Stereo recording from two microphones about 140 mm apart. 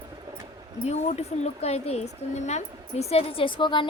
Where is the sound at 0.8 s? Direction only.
50° left (ahead or behind).